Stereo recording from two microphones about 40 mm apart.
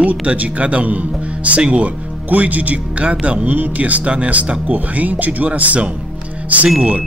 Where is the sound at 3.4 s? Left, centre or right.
Right.